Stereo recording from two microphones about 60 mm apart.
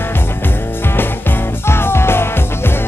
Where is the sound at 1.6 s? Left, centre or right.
Left.